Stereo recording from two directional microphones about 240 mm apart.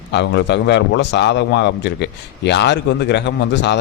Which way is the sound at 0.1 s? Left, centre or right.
Left.